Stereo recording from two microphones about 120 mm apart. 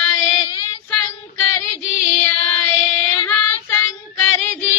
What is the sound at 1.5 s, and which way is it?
Female singing, 25° left (ahead or behind).